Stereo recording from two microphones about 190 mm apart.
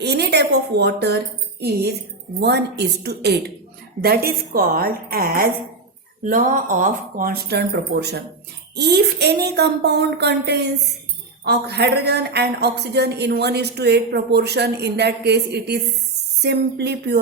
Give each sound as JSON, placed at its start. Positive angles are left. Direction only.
{"t": 0.0, "sound": "a woman's voice", "side_deg": -60}
{"t": 2.4, "sound": "a woman's voice", "side_deg": -60}